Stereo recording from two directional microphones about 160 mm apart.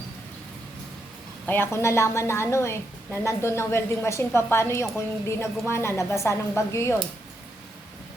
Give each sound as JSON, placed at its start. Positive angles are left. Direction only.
{"t": 1.5, "sound": "a woman's voice", "side_deg": 15}